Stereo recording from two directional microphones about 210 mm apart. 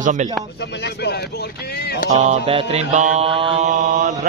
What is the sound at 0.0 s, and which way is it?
Speech, 35° right (ahead or behind).